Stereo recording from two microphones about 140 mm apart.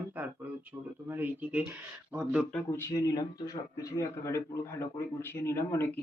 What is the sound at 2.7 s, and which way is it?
Speech, 25° left (ahead or behind).